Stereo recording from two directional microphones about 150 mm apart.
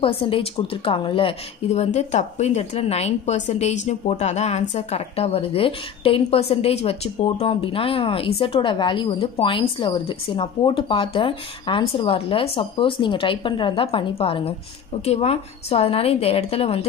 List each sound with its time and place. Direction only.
0.0 s a woman's voice: 35° left (ahead or behind)